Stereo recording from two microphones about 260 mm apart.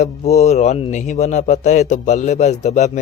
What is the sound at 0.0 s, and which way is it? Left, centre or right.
A man's voice, left.